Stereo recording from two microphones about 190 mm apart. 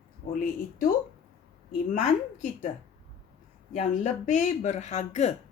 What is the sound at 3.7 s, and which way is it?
Speech, 40° left (ahead or behind).